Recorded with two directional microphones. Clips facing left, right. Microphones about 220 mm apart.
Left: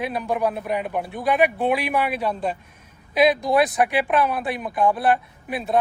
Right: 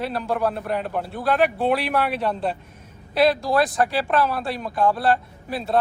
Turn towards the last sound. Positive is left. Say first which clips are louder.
# even
turn(degrees=20)  # may be behind; listen again after turning